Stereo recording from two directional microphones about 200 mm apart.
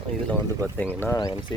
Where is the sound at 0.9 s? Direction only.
15° left (ahead or behind).